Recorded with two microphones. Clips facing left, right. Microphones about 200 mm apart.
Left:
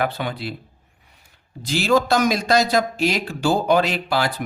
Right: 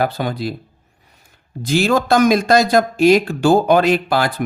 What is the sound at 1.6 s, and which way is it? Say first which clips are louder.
Speech: right 3 dB; 50° right (ahead or behind).